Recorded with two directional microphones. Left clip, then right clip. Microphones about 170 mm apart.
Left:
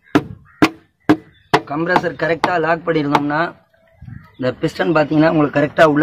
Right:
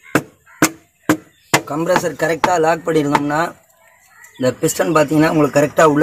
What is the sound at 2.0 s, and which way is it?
A man's voice, 55° right (ahead or behind).